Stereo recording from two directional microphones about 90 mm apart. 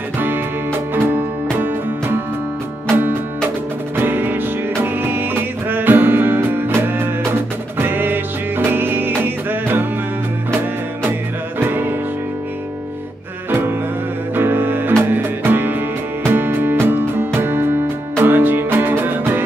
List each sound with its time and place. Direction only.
3.9 s music: 25° right (ahead or behind)
11.6 s music: 20° right (ahead or behind)
13.5 s music: 25° right (ahead or behind)